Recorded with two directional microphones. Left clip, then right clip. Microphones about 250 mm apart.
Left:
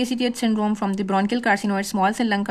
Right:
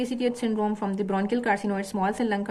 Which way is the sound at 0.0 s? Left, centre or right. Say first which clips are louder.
Left 4 dB; left.